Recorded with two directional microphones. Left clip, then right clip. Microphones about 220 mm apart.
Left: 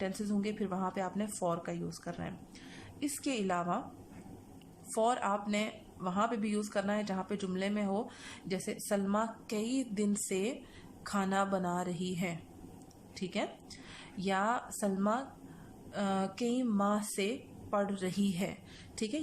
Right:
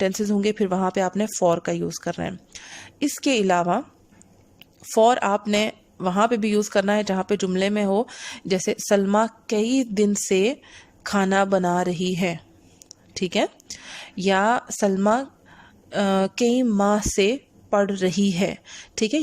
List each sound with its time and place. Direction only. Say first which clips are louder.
0.0 s speech: right 15 dB; 40° right (ahead or behind)
4.9 s a woman's voice: right 14 dB; 45° right (ahead or behind)